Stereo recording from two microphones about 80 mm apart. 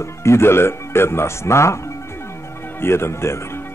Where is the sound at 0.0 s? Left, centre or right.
Left.